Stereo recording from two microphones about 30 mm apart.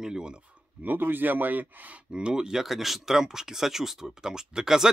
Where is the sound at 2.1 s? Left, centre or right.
Right.